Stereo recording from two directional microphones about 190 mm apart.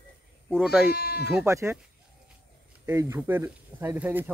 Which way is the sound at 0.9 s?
55° left (ahead or behind).